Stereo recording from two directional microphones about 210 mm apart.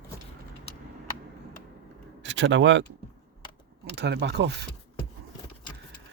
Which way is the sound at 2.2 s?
60° right (ahead or behind).